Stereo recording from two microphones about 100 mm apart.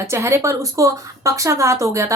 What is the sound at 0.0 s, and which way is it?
Speech, 30° right (ahead or behind).